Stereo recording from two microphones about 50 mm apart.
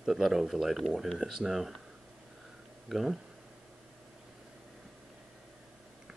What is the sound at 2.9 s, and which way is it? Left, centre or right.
Speech, centre.